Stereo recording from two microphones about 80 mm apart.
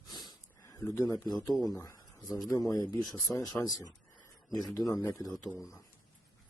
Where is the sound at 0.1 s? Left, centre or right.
Left.